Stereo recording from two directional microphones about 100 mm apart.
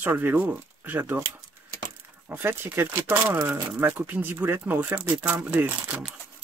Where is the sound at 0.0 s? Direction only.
20° right (ahead or behind).